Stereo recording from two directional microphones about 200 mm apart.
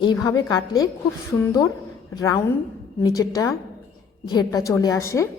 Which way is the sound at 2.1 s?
15° left (ahead or behind).